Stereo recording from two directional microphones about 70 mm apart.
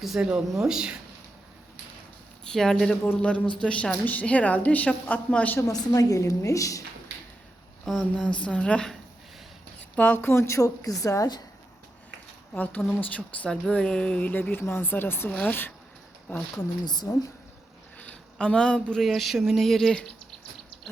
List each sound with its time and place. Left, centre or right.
0.0 s speech: centre
2.4 s speech: centre
3.2 s a woman's voice: centre
5.5 s a woman's voice: left
8.1 s a woman's voice: centre
9.9 s a woman's voice: left
10.2 s a woman's voice: left
12.5 s a woman's voice: left
16.6 s speech: left
18.0 s speech: centre
19.0 s a sound: centre